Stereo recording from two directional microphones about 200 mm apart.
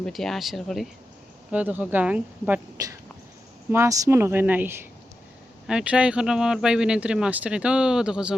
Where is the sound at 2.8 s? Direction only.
20° right (ahead or behind).